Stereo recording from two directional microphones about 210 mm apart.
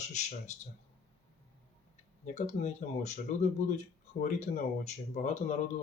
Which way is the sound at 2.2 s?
35° left (ahead or behind).